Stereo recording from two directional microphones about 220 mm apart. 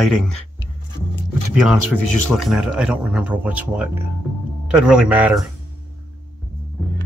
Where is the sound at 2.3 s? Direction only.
Centre (ahead or behind).